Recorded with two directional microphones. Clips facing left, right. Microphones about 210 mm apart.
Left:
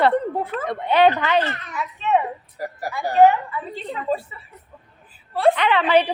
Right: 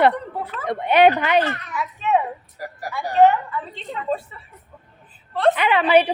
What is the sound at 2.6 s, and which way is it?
Speech, 25° left (ahead or behind).